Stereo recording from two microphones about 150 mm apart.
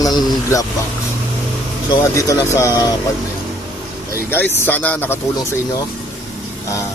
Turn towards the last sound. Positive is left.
turn(degrees=15)  # may be behind; listen again after turning